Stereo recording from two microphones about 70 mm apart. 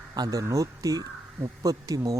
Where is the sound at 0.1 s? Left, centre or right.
Right.